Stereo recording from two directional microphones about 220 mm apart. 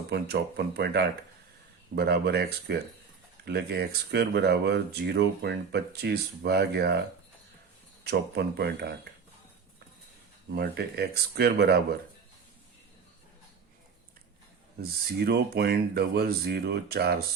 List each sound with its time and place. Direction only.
0.1 s speech: 50° right (ahead or behind)
8.0 s speech: 50° right (ahead or behind)
10.5 s speech: 45° right (ahead or behind)
14.8 s speech: 45° right (ahead or behind)